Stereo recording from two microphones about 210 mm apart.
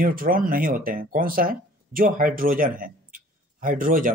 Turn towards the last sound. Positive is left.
turn(degrees=-40)  # may be behind; listen again after turning